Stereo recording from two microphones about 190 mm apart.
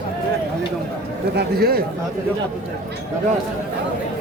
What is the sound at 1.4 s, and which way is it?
Speech, 55° right (ahead or behind).